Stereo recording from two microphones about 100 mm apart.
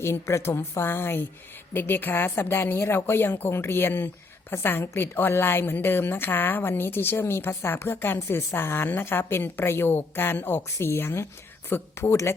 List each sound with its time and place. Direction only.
0.0 s a woman's voice: 25° left (ahead or behind)